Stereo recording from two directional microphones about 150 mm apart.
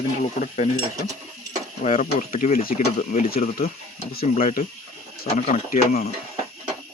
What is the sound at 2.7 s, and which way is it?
Speech, 55° left (ahead or behind).